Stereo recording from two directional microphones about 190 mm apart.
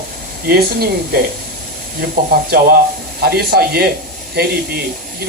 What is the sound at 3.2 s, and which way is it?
Speech, 55° right (ahead or behind).